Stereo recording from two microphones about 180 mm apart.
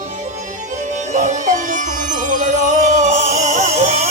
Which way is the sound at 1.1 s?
40° right (ahead or behind).